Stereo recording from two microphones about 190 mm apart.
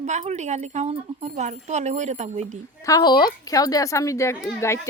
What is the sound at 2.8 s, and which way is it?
A woman's voice, 20° left (ahead or behind).